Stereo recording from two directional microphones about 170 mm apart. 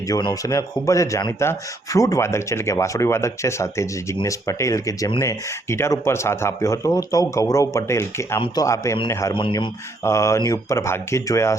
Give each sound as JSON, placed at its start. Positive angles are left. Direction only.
{"t": 0.1, "sound": "speech", "side_deg": 25}
{"t": 10.0, "sound": "speech", "side_deg": 15}